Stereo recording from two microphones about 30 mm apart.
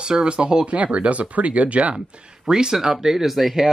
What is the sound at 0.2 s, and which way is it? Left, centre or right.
Speech, right.